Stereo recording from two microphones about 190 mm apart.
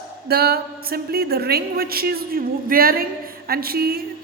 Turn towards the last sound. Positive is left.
turn(degrees=-55)  # may be behind; listen again after turning